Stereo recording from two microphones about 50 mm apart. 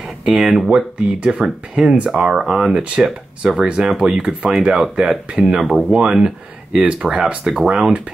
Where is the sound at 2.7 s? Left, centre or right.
Centre.